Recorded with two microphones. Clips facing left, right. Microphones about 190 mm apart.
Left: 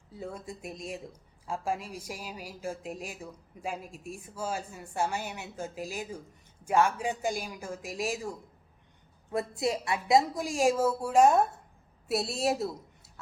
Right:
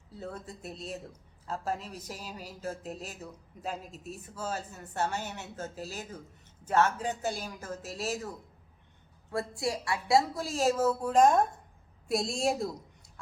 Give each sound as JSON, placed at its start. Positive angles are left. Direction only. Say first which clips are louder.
{"t": 0.2, "sound": "a woman's voice", "louder": "left 2 dB", "side_deg": 10}